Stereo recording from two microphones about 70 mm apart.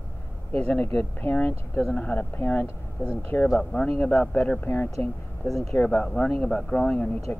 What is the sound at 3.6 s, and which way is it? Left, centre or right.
Speech, centre.